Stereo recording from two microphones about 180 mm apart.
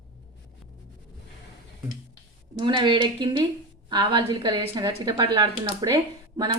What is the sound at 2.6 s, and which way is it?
A woman's voice, 25° right (ahead or behind).